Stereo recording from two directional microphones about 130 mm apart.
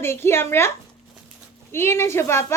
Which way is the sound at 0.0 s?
20° left (ahead or behind).